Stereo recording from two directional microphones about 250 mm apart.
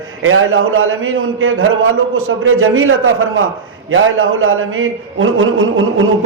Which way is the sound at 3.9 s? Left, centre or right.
Right.